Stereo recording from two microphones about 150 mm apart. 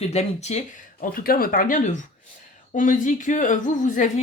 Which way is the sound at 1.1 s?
75° left (ahead or behind).